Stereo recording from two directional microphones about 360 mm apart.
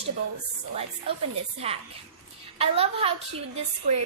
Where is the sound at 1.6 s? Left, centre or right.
Centre.